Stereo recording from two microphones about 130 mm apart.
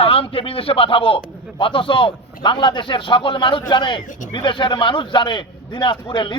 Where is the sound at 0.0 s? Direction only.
45° left (ahead or behind).